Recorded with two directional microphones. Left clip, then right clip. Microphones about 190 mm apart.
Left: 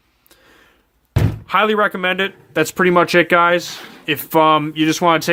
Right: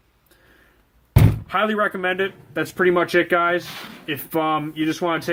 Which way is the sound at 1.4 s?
40° left (ahead or behind).